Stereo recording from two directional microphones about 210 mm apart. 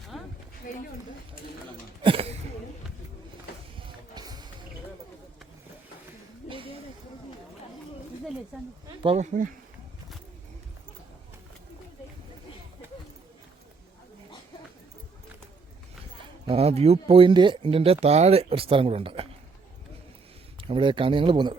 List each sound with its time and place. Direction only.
0.1 s a sound: centre (ahead or behind)
2.0 s a sound: 25° right (ahead or behind)
3.8 s music: 20° right (ahead or behind)
8.5 s speech: 5° right (ahead or behind)
9.0 s speech: 35° right (ahead or behind)
16.5 s speech: 30° right (ahead or behind)
20.6 s speech: 25° right (ahead or behind)